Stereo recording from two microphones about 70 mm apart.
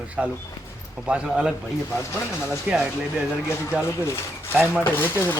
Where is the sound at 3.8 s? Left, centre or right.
Left.